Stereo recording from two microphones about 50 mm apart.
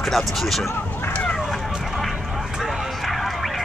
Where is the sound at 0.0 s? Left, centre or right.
Centre.